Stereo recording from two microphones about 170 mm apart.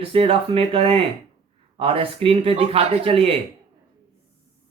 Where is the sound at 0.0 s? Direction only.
35° right (ahead or behind).